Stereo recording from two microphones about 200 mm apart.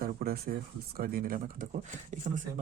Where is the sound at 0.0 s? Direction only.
50° right (ahead or behind).